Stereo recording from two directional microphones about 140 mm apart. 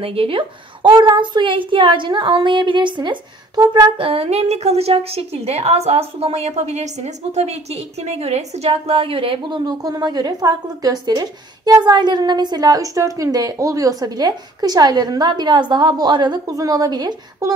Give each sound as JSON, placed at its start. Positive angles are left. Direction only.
{"t": 0.0, "sound": "a woman's voice", "side_deg": -40}
{"t": 4.1, "sound": "a woman's voice", "side_deg": -45}